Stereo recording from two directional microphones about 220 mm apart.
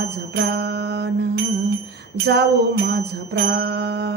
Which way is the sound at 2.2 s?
50° right (ahead or behind).